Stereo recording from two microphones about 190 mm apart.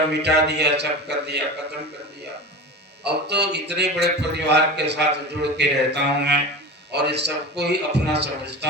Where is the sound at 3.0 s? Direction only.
60° right (ahead or behind).